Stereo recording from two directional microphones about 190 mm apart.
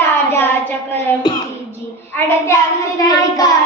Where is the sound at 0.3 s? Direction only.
10° left (ahead or behind).